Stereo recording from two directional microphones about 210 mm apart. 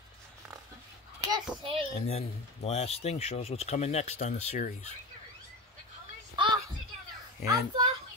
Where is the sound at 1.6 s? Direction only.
25° right (ahead or behind).